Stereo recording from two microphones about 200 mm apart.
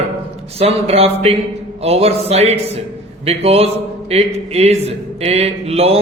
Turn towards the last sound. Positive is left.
turn(degrees=-30)  # may be behind; listen again after turning